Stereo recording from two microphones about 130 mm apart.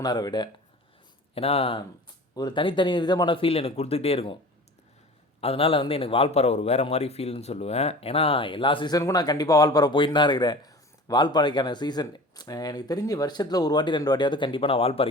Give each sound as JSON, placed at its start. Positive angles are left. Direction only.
{"t": 0.0, "sound": "a man's voice", "side_deg": 30}
{"t": 1.4, "sound": "speech", "side_deg": 50}
{"t": 2.3, "sound": "a man's voice", "side_deg": 35}
{"t": 5.4, "sound": "a man's voice", "side_deg": 45}